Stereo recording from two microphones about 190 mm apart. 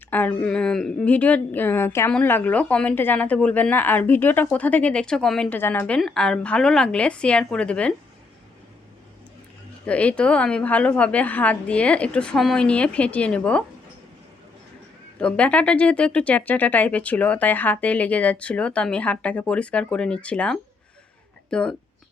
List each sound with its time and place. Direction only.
0.1 s speech: 10° left (ahead or behind)
9.8 s speech: 5° left (ahead or behind)
15.2 s speech: 5° left (ahead or behind)